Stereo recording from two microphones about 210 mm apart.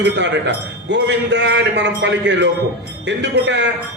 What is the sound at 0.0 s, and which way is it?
A man's voice, 55° right (ahead or behind).